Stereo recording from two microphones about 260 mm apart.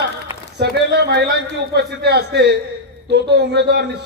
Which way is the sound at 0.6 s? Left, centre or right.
Right.